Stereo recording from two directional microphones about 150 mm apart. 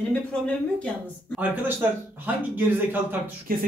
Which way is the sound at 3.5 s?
70° right (ahead or behind).